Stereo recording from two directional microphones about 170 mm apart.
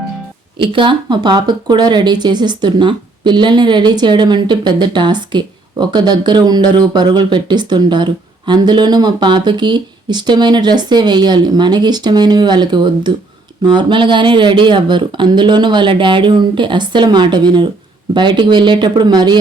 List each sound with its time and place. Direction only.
0.6 s speech: 30° right (ahead or behind)